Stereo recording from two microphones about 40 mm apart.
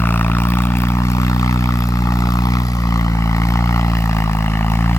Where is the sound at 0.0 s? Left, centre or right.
Left.